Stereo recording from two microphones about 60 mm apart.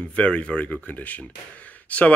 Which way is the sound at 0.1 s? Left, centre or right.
Left.